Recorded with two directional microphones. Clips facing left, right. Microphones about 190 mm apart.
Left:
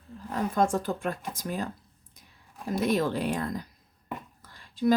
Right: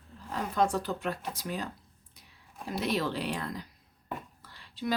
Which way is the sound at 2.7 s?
50° left (ahead or behind).